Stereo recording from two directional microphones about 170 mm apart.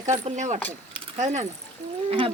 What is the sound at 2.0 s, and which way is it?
Speech, 35° right (ahead or behind).